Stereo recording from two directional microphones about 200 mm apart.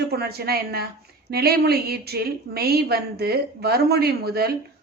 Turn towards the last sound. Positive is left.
turn(degrees=-50)  # may be behind; listen again after turning